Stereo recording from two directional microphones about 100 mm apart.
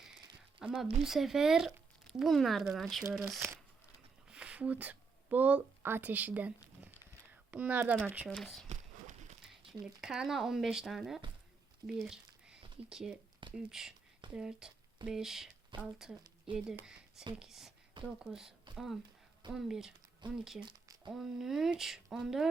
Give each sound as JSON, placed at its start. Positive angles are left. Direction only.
{"t": 0.6, "sound": "speech", "side_deg": -10}
{"t": 3.0, "sound": "speech", "side_deg": -20}
{"t": 4.3, "sound": "speech", "side_deg": -10}
{"t": 9.8, "sound": "speech", "side_deg": -5}
{"t": 15.7, "sound": "speech", "side_deg": -55}
{"t": 16.6, "sound": "speech", "side_deg": -5}
{"t": 19.5, "sound": "speech", "side_deg": -5}